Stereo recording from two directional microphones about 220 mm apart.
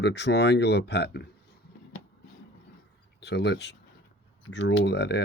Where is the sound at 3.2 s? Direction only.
50° left (ahead or behind).